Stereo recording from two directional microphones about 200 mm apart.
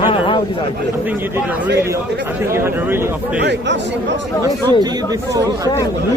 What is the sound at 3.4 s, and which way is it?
Speech, 60° right (ahead or behind).